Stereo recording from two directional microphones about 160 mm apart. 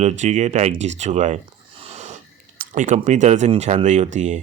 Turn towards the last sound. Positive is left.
turn(degrees=-50)  # may be behind; listen again after turning